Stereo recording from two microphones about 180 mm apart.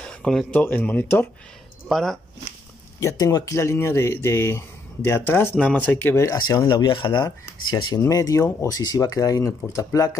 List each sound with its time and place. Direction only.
0.0 s speech: 5° left (ahead or behind)
3.0 s speech: 15° left (ahead or behind)